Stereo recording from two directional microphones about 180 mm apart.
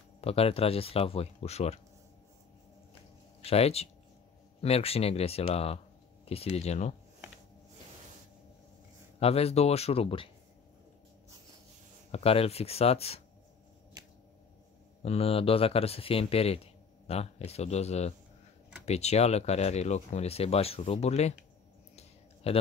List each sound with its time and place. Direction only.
0.2 s speech: 35° left (ahead or behind)
3.4 s speech: 35° left (ahead or behind)
9.2 s speech: 35° left (ahead or behind)
12.1 s speech: 35° left (ahead or behind)
15.0 s speech: 35° left (ahead or behind)
21.9 s a sound: 35° left (ahead or behind)